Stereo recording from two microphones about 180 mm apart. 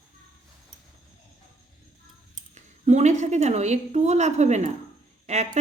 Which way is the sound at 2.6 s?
40° right (ahead or behind).